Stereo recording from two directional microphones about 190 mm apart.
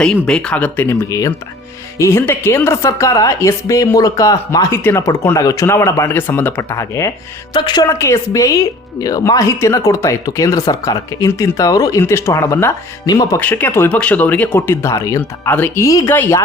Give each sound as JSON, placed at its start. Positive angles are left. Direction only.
{"t": 0.0, "sound": "speech", "side_deg": 5}